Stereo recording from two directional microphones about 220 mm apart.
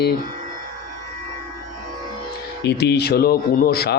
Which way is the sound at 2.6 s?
50° left (ahead or behind).